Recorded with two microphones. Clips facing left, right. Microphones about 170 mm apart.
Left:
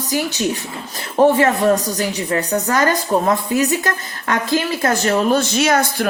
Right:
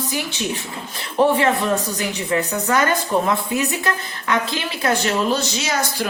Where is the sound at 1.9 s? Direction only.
40° left (ahead or behind); by 6.1 s 55° left (ahead or behind).